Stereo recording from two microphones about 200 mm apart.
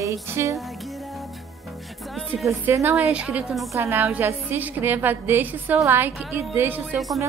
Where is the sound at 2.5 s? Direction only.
15° right (ahead or behind).